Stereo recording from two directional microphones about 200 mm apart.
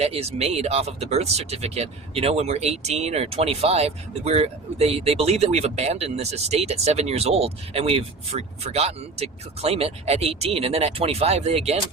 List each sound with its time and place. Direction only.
0.0 s speech: 30° right (ahead or behind)